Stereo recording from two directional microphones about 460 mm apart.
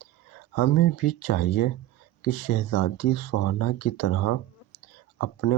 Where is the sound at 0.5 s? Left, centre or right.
Left.